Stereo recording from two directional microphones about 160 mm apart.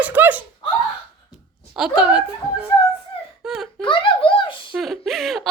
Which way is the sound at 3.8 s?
30° left (ahead or behind).